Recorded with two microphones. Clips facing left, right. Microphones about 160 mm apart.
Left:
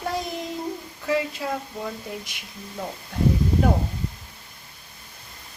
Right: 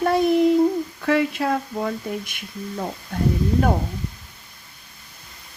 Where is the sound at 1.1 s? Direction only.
65° right (ahead or behind).